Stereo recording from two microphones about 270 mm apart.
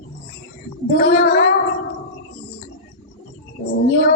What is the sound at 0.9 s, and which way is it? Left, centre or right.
Speech, left.